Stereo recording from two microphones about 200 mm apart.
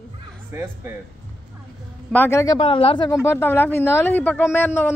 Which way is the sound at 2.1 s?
10° left (ahead or behind).